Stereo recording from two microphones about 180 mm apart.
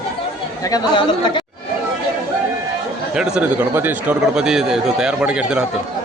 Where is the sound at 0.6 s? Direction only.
25° left (ahead or behind).